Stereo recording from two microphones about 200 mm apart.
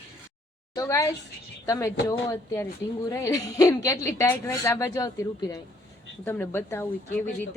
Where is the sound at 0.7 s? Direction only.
15° left (ahead or behind).